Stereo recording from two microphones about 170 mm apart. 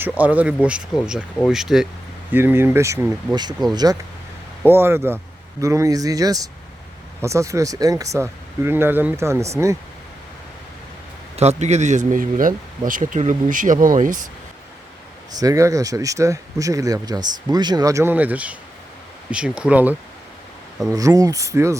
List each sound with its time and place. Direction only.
0.0 s speech: 10° right (ahead or behind)
4.7 s speech: 15° right (ahead or behind)
11.3 s a man's voice: 40° right (ahead or behind)
15.4 s speech: 20° right (ahead or behind)
20.9 s speech: 20° right (ahead or behind)